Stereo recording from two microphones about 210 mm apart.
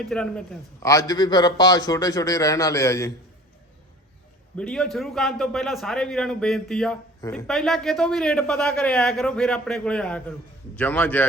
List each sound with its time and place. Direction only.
0.1 s a man's voice: 5° left (ahead or behind)
0.9 s a man's voice: 15° left (ahead or behind)
4.5 s a man's voice: 5° left (ahead or behind)
7.2 s a woman's voice: 15° left (ahead or behind)
7.4 s a man's voice: centre (ahead or behind)